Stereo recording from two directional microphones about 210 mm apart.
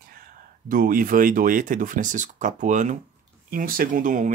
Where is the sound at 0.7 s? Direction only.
40° right (ahead or behind).